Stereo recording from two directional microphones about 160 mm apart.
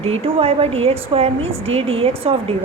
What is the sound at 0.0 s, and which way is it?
A woman's voice, 35° right (ahead or behind).